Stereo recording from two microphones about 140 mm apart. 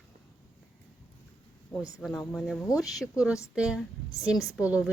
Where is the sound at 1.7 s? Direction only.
20° left (ahead or behind).